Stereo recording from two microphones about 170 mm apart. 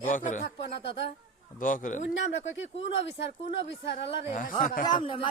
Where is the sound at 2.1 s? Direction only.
90° left.